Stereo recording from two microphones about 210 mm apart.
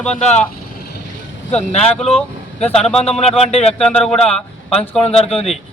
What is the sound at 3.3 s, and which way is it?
Speech, 30° left (ahead or behind).